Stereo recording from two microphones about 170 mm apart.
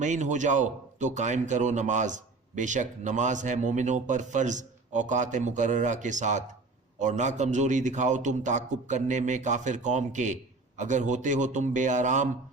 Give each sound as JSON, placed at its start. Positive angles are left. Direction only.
{"t": 0.0, "sound": "a man's voice", "side_deg": -45}